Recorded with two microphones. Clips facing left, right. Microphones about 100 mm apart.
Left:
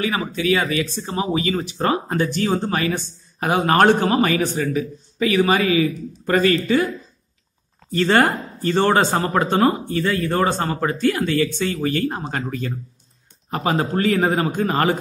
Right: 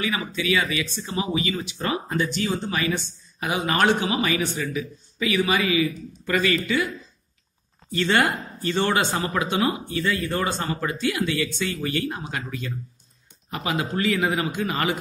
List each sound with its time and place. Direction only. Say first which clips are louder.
0.0 s speech: left 5 dB; 45° left (ahead or behind)
7.9 s speech: left 5 dB; 45° left (ahead or behind)